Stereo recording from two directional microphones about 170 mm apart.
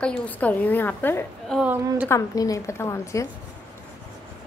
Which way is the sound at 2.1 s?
20° left (ahead or behind).